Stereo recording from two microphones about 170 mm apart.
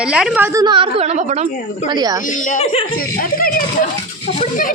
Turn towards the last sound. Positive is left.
turn(degrees=55)  # may be behind; listen again after turning